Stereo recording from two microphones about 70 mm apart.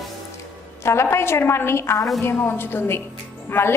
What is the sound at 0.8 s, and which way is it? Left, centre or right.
A woman's voice, left.